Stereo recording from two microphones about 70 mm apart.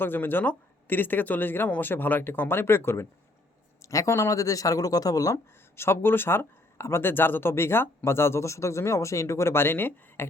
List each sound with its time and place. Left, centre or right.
0.0 s speech: left
3.8 s speech: left
5.7 s speech: left